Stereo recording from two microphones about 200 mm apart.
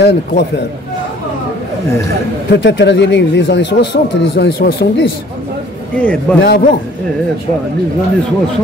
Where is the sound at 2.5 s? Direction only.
60° left (ahead or behind).